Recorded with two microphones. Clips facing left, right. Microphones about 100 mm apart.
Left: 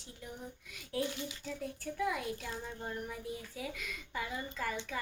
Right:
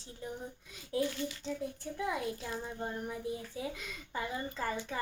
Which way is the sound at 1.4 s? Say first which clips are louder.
Right 3 dB; 25° right (ahead or behind).